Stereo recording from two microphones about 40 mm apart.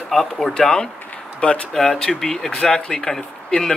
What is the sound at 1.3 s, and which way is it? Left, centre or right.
Speech, left.